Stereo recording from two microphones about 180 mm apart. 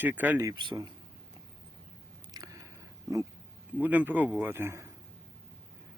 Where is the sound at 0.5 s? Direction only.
25° right (ahead or behind).